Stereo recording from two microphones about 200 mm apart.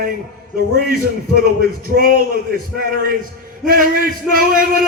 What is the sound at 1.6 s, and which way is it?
Speech, 50° right (ahead or behind).